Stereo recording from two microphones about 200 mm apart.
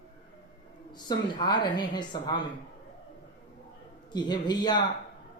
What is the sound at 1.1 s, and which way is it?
Speech, 20° left (ahead or behind).